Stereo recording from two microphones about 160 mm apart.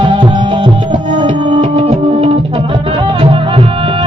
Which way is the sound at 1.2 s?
30° right (ahead or behind).